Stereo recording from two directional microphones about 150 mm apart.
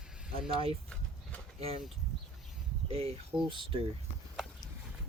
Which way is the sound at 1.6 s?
40° right (ahead or behind).